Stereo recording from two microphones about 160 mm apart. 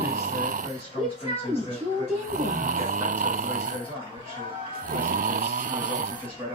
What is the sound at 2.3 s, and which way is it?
Speech, 55° right (ahead or behind).